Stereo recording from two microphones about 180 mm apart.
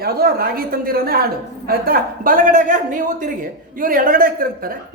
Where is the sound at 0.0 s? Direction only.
60° right (ahead or behind).